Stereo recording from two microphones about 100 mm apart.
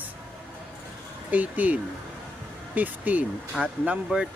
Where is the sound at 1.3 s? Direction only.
15° right (ahead or behind).